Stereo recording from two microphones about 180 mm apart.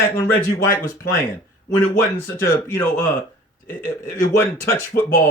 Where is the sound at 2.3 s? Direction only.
10° left (ahead or behind).